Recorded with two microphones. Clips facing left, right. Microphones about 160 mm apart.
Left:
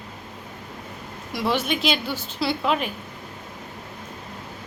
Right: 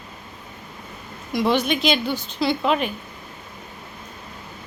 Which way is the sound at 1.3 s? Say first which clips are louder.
Right 4 dB; 5° left (ahead or behind).